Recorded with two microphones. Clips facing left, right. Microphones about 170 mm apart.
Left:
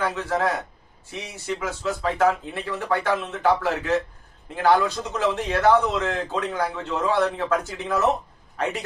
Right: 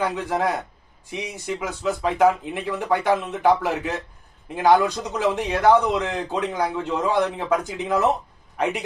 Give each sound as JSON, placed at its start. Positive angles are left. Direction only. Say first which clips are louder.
{"t": 0.0, "sound": "a man's voice", "louder": "right 1 dB", "side_deg": -15}